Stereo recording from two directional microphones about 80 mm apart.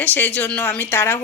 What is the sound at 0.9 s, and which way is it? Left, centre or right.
Speech, left.